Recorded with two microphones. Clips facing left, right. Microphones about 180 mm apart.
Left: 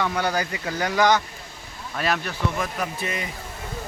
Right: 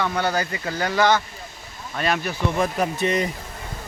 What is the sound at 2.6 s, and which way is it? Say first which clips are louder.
Speech: right 6 dB; 35° right (ahead or behind).